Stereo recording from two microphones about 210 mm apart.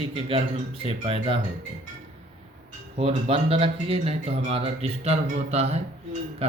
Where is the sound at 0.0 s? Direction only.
25° right (ahead or behind).